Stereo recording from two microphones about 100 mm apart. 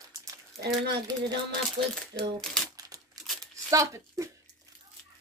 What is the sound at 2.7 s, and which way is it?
Crumpling, 40° right (ahead or behind).